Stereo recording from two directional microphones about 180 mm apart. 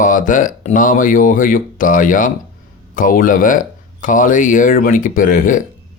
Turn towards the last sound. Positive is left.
turn(degrees=45)  # may be behind; listen again after turning